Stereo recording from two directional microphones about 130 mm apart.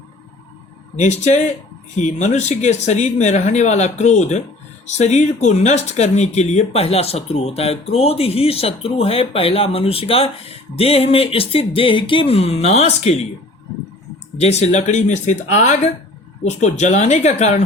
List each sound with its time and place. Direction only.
0.9 s speech: 65° left (ahead or behind)
14.3 s speech: 55° left (ahead or behind)